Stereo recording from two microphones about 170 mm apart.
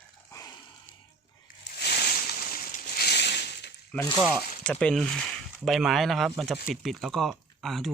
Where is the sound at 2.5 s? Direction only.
70° left (ahead or behind).